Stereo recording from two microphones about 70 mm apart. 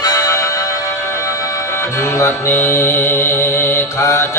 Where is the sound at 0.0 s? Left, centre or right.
Left.